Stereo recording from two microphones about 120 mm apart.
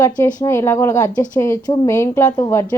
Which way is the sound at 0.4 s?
20° left (ahead or behind).